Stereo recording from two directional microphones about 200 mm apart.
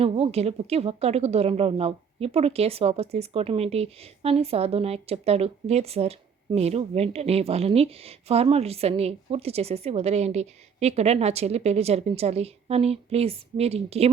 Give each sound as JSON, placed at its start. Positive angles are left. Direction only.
{"t": 0.0, "sound": "speech", "side_deg": -30}